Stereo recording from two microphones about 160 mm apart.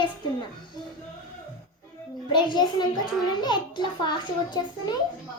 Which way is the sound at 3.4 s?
25° left (ahead or behind).